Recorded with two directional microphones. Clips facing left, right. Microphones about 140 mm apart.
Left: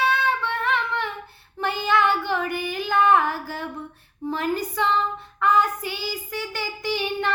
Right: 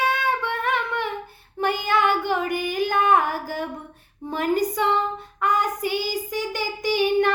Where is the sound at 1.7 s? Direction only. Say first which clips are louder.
Left 2 dB; 15° right (ahead or behind).